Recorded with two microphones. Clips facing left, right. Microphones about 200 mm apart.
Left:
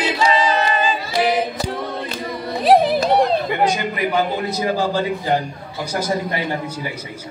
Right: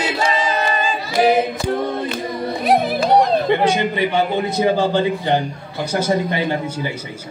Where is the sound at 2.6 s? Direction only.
30° left (ahead or behind).